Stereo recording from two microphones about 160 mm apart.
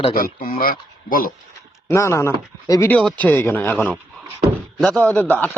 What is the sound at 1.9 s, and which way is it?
A man's voice, 15° left (ahead or behind).